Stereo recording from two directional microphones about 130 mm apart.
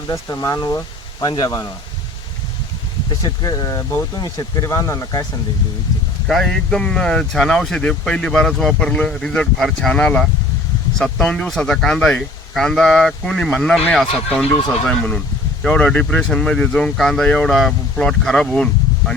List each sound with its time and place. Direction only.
0.1 s speech: 25° left (ahead or behind)
3.4 s speech: 30° left (ahead or behind)
6.2 s speech: 5° left (ahead or behind)